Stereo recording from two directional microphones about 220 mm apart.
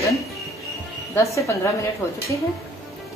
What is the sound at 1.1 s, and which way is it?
Speech, 15° left (ahead or behind).